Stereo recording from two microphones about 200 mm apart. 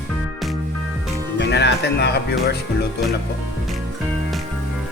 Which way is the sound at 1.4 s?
55° left (ahead or behind).